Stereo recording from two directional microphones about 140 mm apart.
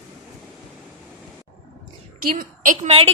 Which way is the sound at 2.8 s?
45° right (ahead or behind).